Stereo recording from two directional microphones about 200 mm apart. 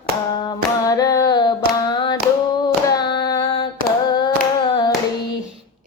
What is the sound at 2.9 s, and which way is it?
Carnatic music, 20° left (ahead or behind).